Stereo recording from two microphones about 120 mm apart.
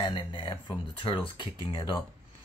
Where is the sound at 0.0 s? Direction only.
40° left (ahead or behind).